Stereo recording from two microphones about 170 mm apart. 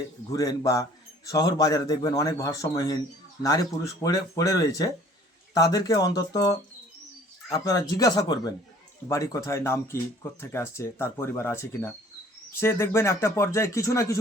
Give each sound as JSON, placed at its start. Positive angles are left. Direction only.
{"t": 0.3, "sound": "a man's voice", "side_deg": 20}